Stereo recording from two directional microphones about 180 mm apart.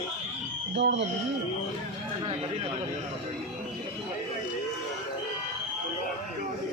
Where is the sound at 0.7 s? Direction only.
80° right.